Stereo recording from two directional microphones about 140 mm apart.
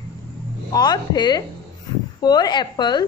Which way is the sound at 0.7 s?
30° left (ahead or behind).